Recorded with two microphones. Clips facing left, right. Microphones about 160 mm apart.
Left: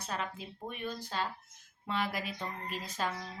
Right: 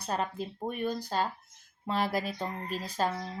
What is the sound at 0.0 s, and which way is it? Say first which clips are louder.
A woman's voice: right 6 dB; 40° right (ahead or behind).